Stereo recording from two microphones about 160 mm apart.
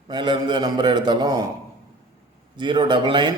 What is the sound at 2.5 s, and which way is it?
Speech, 30° right (ahead or behind).